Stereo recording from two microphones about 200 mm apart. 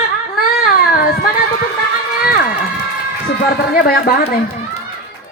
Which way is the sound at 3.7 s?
45° left (ahead or behind).